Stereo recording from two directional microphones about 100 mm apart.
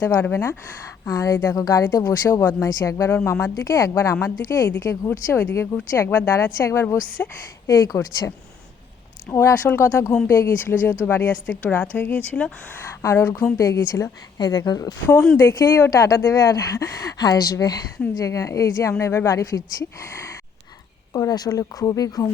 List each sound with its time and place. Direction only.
0.0 s a woman's voice: 20° left (ahead or behind)
1.0 s a woman's voice: 35° left (ahead or behind)
9.3 s a woman's voice: 30° left (ahead or behind); by 12.5 s 15° left (ahead or behind)
13.0 s a woman's voice: 30° left (ahead or behind)
14.3 s speech: 45° left (ahead or behind)
15.4 s a woman's voice: 25° left (ahead or behind)
15.9 s a woman's voice: 35° left (ahead or behind)